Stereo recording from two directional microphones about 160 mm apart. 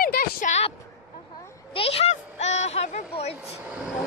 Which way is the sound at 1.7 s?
40° left (ahead or behind).